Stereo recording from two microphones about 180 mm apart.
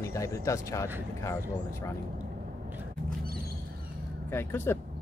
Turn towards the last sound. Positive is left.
turn(degrees=10)  # may be behind; listen again after turning